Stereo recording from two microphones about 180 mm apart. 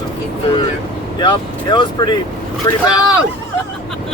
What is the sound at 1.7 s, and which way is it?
Speech, 25° left (ahead or behind).